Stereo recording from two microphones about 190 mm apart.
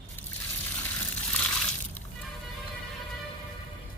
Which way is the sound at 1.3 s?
5° left (ahead or behind).